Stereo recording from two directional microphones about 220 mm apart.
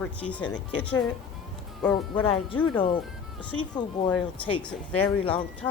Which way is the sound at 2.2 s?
25° left (ahead or behind).